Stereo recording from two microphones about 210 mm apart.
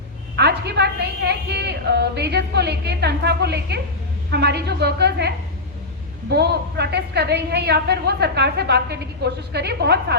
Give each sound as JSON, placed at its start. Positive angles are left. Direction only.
{"t": 0.3, "sound": "a woman's voice", "side_deg": -50}
{"t": 6.3, "sound": "a woman's voice", "side_deg": -50}